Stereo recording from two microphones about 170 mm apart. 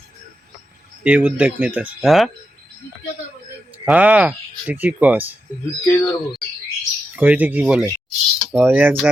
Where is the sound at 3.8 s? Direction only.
10° right (ahead or behind).